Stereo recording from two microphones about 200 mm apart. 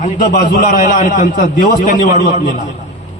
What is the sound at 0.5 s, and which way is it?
A man's voice, 45° left (ahead or behind).